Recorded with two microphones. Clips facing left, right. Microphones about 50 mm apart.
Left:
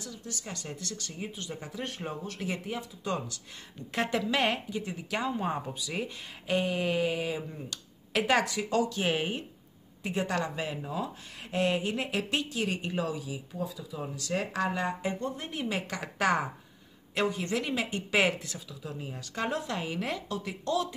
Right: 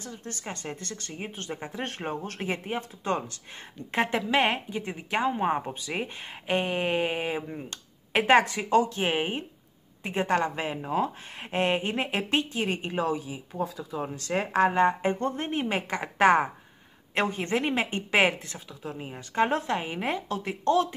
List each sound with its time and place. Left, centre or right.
0.0 s speech: right